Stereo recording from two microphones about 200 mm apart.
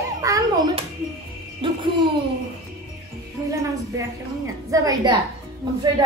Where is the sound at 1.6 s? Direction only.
25° right (ahead or behind).